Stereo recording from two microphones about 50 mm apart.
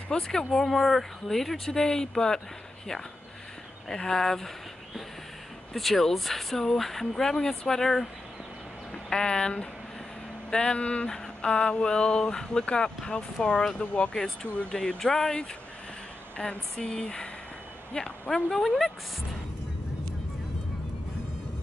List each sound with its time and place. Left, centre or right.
0.1 s speech: centre
3.9 s speech: centre
5.7 s speech: centre
9.1 s speech: centre
10.5 s a sound: centre
14.1 s speech: centre
16.8 s a sound: centre
17.9 s speech: centre